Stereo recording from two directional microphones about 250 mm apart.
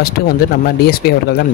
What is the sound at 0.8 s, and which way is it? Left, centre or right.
Speech, left.